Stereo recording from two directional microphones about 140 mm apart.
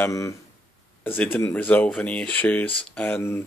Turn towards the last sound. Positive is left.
turn(degrees=15)  # may be behind; listen again after turning